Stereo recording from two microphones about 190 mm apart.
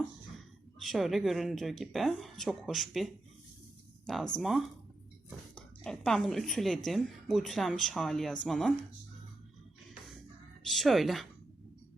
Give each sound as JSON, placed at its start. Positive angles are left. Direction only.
{"t": 0.3, "sound": "a woman's voice", "side_deg": 0}
{"t": 10.7, "sound": "a woman's voice", "side_deg": 0}